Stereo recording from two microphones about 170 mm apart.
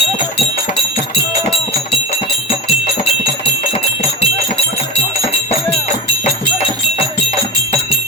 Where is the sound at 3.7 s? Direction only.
35° left (ahead or behind).